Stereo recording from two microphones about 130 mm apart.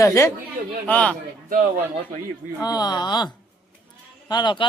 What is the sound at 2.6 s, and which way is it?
Speech, 30° left (ahead or behind).